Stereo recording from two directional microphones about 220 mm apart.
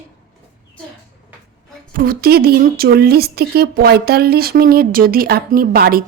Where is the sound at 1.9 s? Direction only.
40° right (ahead or behind).